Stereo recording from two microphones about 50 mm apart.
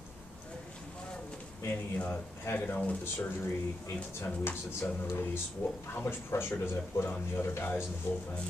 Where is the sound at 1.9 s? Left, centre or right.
Left.